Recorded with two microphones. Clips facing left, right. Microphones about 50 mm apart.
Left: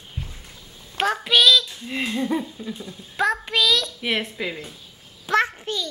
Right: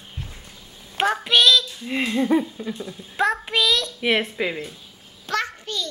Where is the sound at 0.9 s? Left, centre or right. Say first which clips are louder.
Right 1 dB; centre.